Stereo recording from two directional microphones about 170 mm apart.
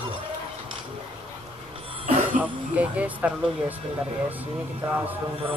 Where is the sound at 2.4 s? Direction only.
10° right (ahead or behind).